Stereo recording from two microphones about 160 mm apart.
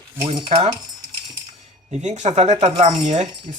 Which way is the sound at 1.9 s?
45° right (ahead or behind).